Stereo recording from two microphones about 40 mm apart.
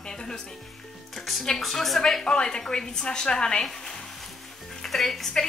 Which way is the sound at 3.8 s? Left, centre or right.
Centre.